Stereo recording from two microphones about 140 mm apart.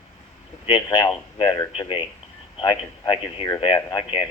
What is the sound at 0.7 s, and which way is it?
Speech, 30° left (ahead or behind).